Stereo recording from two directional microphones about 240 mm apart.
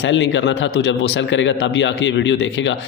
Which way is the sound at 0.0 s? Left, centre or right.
Left.